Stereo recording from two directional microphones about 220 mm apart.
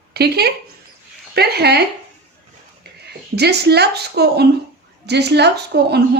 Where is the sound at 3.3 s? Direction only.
50° right (ahead or behind).